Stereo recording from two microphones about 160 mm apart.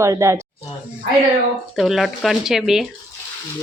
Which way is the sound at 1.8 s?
Centre (ahead or behind).